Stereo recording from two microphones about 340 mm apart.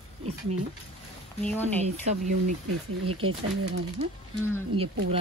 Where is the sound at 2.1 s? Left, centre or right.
Right.